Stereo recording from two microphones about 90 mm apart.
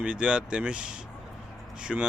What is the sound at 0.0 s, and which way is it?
Speech, 10° right (ahead or behind).